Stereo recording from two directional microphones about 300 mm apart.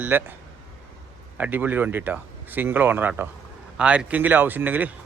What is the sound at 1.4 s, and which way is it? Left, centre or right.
Speech, centre.